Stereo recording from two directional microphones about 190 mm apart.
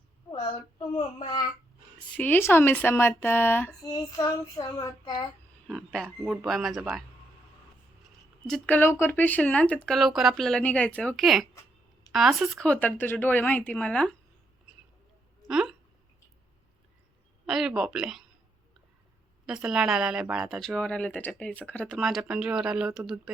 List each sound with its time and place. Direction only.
0.9 s a child's voice: 25° left (ahead or behind)
2.1 s speech: 10° left (ahead or behind)
5.6 s speech: centre (ahead or behind)
8.4 s speech: 5° left (ahead or behind)
15.4 s speech: 5° right (ahead or behind)
17.4 s speech: 5° right (ahead or behind)
19.5 s speech: 5° right (ahead or behind)